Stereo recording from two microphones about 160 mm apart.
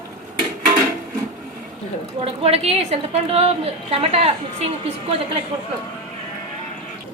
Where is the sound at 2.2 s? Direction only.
40° right (ahead or behind).